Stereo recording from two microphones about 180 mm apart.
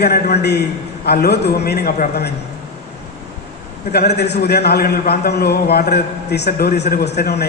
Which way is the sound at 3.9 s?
65° left (ahead or behind).